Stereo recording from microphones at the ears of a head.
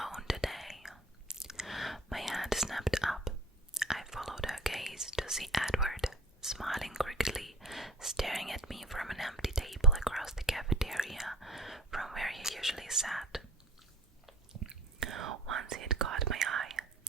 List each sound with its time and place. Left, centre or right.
0.0 s whispering: centre
14.5 s whispering: right